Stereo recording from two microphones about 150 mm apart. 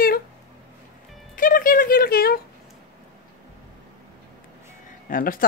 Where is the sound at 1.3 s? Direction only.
65° left (ahead or behind); by 2.3 s 85° left.